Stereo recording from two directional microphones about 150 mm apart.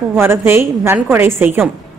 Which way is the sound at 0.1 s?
15° right (ahead or behind).